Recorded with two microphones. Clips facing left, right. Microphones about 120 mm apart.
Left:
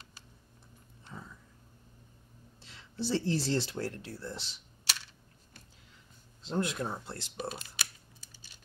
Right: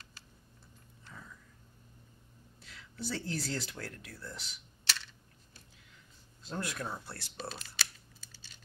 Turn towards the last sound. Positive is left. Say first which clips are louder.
# left 3 dB
turn(degrees=15)  # may be behind; listen again after turning